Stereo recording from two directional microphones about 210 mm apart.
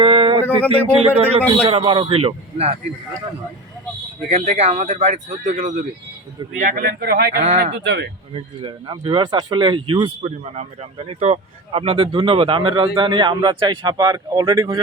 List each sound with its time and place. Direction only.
0.0 s a sound: 25° right (ahead or behind)
0.7 s speech: 30° right (ahead or behind)
4.3 s speech: 30° right (ahead or behind); by 8.1 s 55° right (ahead or behind)
8.6 s speech: 25° right (ahead or behind)